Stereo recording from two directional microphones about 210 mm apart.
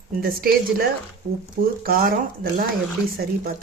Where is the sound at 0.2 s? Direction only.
45° right (ahead or behind).